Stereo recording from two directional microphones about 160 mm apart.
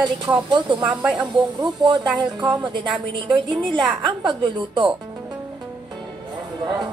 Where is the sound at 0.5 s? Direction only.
30° right (ahead or behind).